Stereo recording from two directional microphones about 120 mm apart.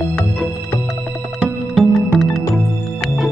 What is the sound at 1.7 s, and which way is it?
Music, centre (ahead or behind).